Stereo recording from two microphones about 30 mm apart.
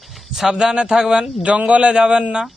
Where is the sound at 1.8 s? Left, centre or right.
Right.